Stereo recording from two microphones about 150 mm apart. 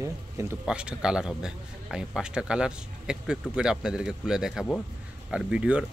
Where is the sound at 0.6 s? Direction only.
5° right (ahead or behind).